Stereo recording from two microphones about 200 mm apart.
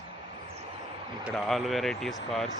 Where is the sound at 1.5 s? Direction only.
Centre (ahead or behind).